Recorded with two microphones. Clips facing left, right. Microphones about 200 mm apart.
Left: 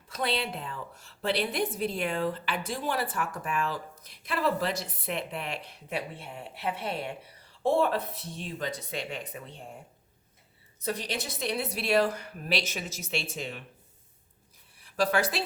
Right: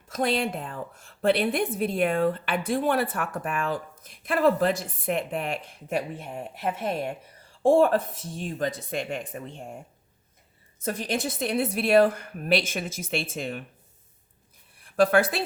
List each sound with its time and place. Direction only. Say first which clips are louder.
0.1 s a woman's voice: right 5 dB; 45° right (ahead or behind)
10.8 s a woman's voice: right 4 dB; 50° right (ahead or behind)
14.8 s speech: right 6 dB; 55° right (ahead or behind)